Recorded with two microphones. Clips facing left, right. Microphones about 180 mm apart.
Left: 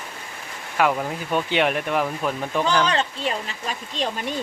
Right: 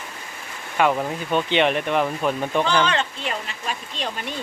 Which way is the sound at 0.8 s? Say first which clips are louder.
Right 1 dB; centre (ahead or behind).